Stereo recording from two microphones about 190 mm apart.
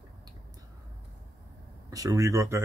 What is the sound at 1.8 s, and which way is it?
Speech, 20° right (ahead or behind).